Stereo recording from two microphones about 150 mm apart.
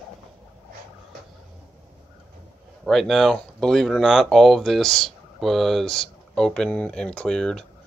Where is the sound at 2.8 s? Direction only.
Centre (ahead or behind).